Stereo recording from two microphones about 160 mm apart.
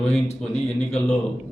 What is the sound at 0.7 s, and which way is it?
Speech, 40° left (ahead or behind).